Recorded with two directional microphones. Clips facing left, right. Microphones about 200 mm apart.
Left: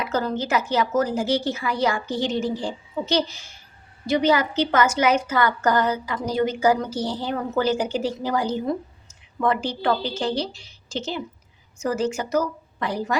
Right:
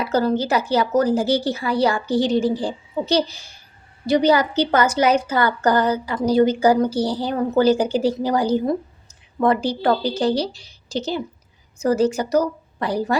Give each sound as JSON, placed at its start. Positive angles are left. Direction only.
{"t": 0.0, "sound": "a woman's voice", "side_deg": -35}